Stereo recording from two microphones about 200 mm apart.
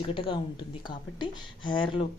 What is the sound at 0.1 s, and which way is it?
Speech, 25° left (ahead or behind).